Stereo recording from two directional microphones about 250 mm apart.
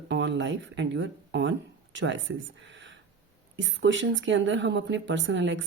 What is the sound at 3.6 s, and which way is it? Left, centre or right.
Speech, right.